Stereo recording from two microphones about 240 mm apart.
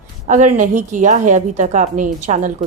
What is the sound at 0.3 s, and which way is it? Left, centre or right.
A woman's voice, right.